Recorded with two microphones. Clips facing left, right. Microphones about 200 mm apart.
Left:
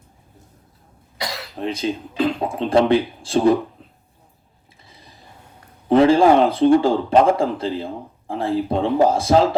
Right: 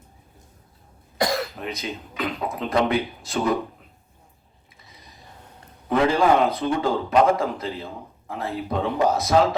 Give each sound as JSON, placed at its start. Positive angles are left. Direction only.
{"t": 1.2, "sound": "cough", "side_deg": -50}
{"t": 1.5, "sound": "speech", "side_deg": 30}
{"t": 4.9, "sound": "a sound", "side_deg": 30}
{"t": 5.9, "sound": "speech", "side_deg": 30}